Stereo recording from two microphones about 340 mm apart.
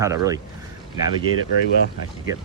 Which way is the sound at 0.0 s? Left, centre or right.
Centre.